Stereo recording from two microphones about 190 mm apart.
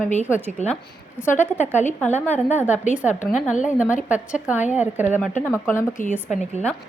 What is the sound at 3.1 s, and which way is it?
Speech, 40° left (ahead or behind).